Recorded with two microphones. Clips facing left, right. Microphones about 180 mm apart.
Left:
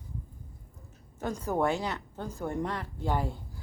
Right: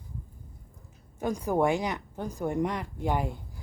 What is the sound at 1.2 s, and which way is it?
Speech, 15° right (ahead or behind).